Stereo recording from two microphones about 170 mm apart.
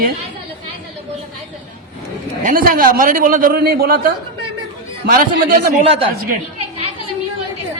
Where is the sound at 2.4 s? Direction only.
55° right (ahead or behind).